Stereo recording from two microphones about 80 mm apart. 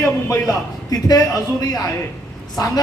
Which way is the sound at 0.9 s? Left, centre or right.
Left.